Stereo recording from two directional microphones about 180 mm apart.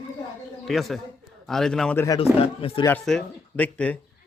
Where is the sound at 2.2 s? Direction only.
30° left (ahead or behind).